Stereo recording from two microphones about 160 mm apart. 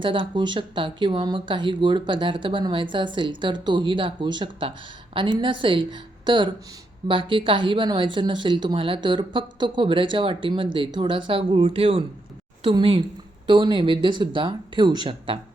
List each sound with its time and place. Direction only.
0.0 s speech: 30° right (ahead or behind)